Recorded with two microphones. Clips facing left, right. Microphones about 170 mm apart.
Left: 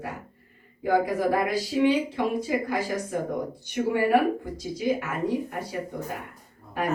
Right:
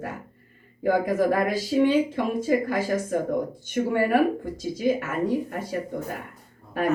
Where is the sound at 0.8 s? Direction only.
50° right (ahead or behind).